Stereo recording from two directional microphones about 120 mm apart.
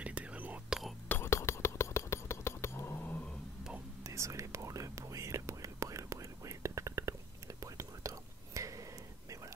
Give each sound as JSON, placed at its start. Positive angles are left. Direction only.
{"t": 0.0, "sound": "whispering", "side_deg": -10}
{"t": 1.0, "sound": "whispering", "side_deg": 15}
{"t": 4.0, "sound": "whispering", "side_deg": -25}